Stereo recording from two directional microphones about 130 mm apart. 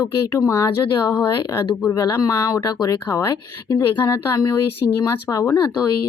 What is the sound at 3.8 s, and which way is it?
Speech, 20° left (ahead or behind).